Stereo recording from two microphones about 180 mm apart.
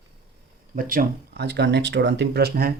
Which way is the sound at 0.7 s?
50° right (ahead or behind).